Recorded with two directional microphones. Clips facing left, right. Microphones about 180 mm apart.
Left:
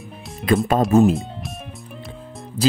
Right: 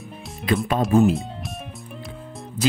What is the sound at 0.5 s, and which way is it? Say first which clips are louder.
Speech: left 4 dB; 45° left (ahead or behind).